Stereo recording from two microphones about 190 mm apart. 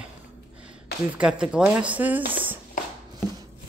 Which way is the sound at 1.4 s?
5° right (ahead or behind).